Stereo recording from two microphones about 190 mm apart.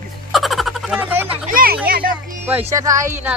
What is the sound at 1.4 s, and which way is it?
Speech, 50° right (ahead or behind).